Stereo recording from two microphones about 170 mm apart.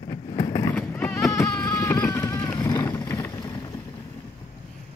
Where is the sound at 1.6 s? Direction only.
20° left (ahead or behind).